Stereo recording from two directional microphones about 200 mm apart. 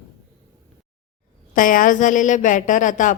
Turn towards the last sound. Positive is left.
turn(degrees=40)  # may be behind; listen again after turning